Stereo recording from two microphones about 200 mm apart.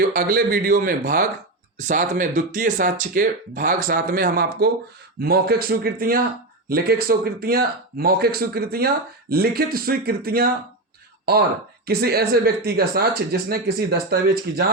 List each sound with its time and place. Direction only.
0.1 s speech: 45° right (ahead or behind)
11.9 s speech: 50° right (ahead or behind)